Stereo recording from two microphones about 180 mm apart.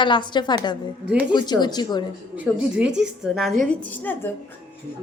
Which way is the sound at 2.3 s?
5° right (ahead or behind).